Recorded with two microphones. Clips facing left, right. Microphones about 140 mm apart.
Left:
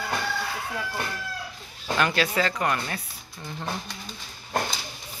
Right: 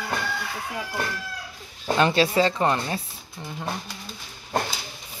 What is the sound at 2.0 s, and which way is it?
Speech, 25° right (ahead or behind).